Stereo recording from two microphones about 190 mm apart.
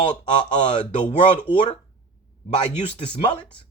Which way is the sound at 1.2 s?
25° left (ahead or behind).